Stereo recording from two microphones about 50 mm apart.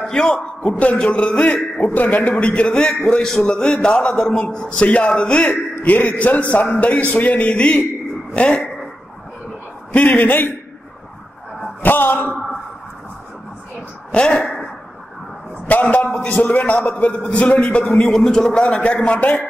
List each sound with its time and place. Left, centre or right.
0.0 s a man's voice: centre
9.9 s a man's voice: left
11.8 s a man's voice: left
14.1 s a man's voice: left
14.4 s a sound: centre
15.6 s a man's voice: left
16.3 s a man's voice: left
18.0 s a man's voice: centre